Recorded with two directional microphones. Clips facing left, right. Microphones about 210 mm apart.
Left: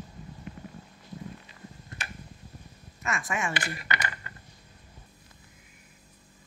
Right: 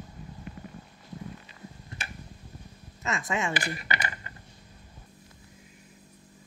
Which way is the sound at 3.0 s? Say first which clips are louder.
Right 2 dB; 20° right (ahead or behind).